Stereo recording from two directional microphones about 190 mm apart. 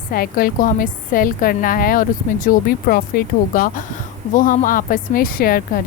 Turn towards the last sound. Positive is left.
turn(degrees=50)  # may be behind; listen again after turning